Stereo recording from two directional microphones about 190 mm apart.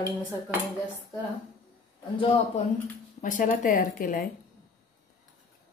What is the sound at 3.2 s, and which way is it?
Speech, 45° left (ahead or behind).